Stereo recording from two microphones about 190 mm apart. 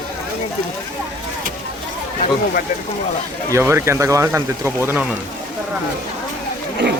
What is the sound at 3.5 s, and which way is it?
Speech, 15° right (ahead or behind).